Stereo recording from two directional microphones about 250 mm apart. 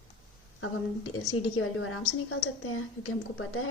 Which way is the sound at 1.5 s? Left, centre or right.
Left.